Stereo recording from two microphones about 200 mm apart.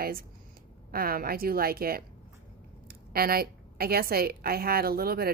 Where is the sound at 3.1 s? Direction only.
50° right (ahead or behind).